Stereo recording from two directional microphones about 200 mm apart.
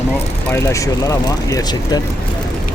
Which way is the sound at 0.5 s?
15° left (ahead or behind).